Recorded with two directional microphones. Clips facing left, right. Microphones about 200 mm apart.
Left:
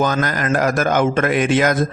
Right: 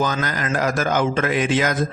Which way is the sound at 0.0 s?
55° left (ahead or behind).